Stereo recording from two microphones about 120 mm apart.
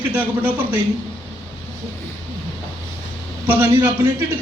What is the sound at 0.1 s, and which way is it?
Speech, 15° right (ahead or behind).